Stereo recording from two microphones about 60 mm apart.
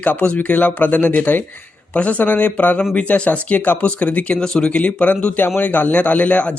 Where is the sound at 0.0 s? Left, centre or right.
Left.